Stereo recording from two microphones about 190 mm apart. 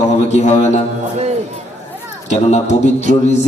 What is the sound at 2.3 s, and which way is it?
Speech, 35° left (ahead or behind).